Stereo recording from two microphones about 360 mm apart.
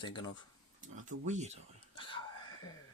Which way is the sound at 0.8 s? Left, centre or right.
Centre.